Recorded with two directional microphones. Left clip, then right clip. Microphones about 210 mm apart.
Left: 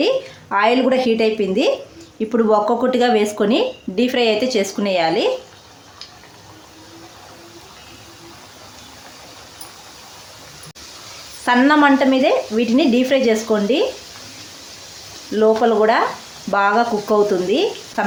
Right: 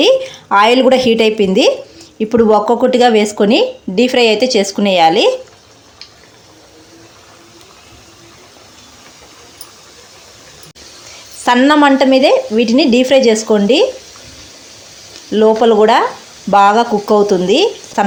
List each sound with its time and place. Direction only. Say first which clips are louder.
0.0 s a woman's voice: right 8 dB; 30° right (ahead or behind)
11.4 s speech: right 4 dB; 25° right (ahead or behind)
15.3 s speech: right 5 dB; 30° right (ahead or behind)